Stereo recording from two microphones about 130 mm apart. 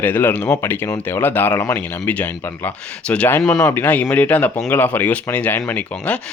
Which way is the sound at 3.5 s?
20° left (ahead or behind).